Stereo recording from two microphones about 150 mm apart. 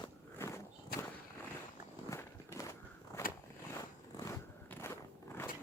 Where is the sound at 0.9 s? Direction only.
90° left.